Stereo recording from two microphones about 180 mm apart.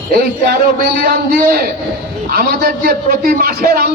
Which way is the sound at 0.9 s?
55° right (ahead or behind).